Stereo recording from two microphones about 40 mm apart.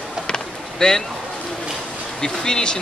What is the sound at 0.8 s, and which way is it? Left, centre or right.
Speech, left.